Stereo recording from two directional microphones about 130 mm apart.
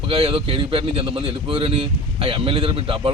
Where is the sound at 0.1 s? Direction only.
45° right (ahead or behind).